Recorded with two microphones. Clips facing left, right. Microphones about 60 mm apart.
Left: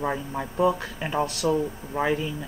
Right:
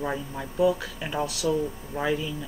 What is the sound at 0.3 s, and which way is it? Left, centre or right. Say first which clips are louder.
Speech: even; left.